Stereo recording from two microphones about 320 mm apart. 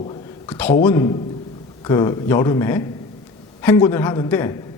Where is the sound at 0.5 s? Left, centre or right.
Centre.